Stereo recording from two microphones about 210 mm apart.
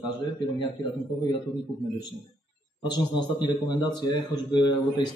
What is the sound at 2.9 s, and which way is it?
A man's voice, 20° left (ahead or behind).